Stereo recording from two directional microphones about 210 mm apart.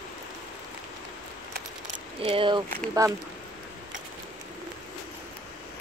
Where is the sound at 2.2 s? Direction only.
25° right (ahead or behind).